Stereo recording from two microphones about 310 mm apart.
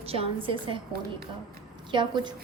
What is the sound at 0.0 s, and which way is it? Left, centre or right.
Speech, centre.